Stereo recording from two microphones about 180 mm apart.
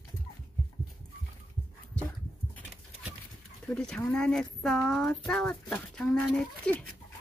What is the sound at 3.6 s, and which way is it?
Speech, 5° left (ahead or behind).